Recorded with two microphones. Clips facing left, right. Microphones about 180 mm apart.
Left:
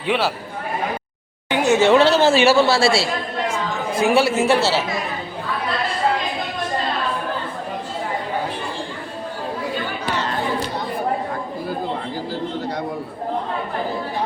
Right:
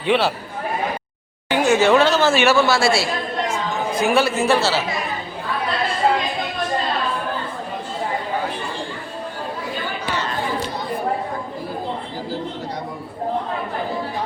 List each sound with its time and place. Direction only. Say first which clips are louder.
0.0 s speech: right 2 dB; 5° left (ahead or behind)
1.5 s speech: even; 20° left (ahead or behind)